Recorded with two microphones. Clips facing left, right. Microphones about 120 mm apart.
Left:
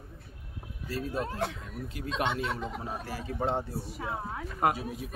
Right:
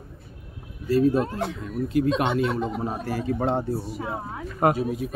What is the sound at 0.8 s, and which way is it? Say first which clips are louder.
Speech: right 13 dB; 60° right (ahead or behind).